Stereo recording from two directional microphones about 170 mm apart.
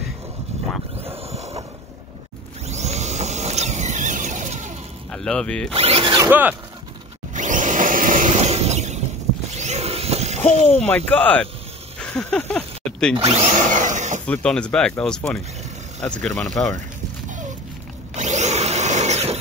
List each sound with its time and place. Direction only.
1.0 s a sound: 40° right (ahead or behind)
2.6 s vehicle: 40° right (ahead or behind)
5.1 s speech: 5° left (ahead or behind)
5.7 s speech: 35° right (ahead or behind)
6.1 s speech: 15° right (ahead or behind)
7.3 s a sound: 50° right (ahead or behind)
10.8 s speech: 5° left (ahead or behind)
12.0 s a sound: 5° left (ahead or behind)
13.1 s drill: 35° right (ahead or behind)
14.2 s speech: 5° left (ahead or behind)
18.1 s tools: 45° right (ahead or behind)